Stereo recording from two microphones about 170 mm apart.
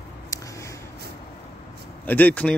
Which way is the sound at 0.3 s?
20° left (ahead or behind).